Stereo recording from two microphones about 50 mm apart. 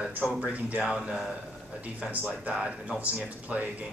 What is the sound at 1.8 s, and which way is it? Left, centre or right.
A man's voice, right.